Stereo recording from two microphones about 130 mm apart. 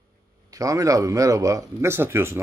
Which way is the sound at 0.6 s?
25° right (ahead or behind).